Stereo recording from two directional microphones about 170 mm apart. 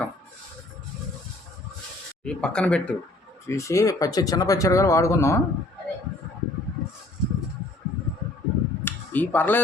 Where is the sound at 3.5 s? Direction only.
20° left (ahead or behind).